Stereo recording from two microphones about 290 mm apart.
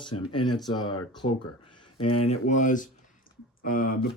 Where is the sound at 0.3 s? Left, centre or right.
Centre.